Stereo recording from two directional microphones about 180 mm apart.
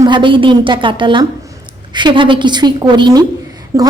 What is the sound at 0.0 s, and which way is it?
A woman's voice, 25° right (ahead or behind).